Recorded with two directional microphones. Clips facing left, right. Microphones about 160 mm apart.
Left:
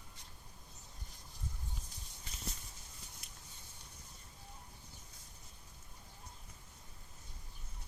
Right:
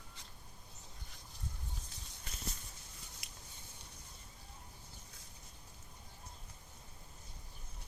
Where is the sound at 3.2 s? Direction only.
90° right.